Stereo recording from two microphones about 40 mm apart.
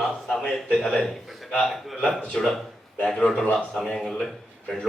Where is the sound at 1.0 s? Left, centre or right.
Centre.